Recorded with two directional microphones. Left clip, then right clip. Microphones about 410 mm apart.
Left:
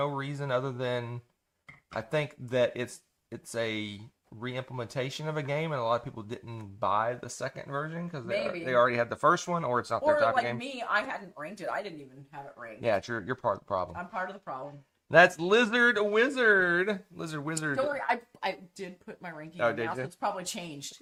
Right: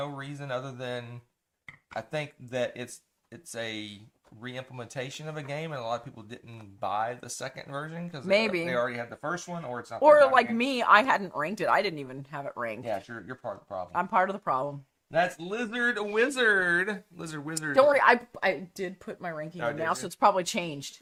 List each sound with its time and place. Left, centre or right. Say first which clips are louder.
0.0 s speech: left 4 dB; left
8.3 s speech: right 7 dB; right
8.7 s speech: left 5 dB; left
10.0 s speech: right 9 dB; right
12.9 s speech: left 5 dB; left
13.9 s speech: right 10 dB; right
15.1 s speech: left 7 dB; left
16.0 s speech: left 1 dB; centre
17.7 s speech: right 12 dB; right
20.1 s speech: right 9 dB; right